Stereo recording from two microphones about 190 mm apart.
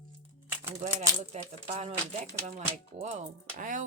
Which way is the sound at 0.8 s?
35° right (ahead or behind).